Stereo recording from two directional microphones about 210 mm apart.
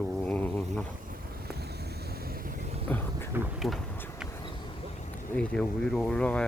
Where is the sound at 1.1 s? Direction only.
50° right (ahead or behind).